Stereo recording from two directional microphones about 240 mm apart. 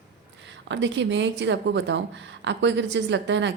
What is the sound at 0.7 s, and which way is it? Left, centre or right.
A woman's voice, right.